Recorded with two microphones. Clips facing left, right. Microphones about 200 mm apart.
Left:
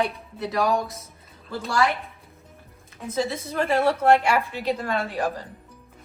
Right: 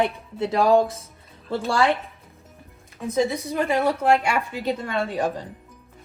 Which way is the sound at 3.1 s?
15° right (ahead or behind).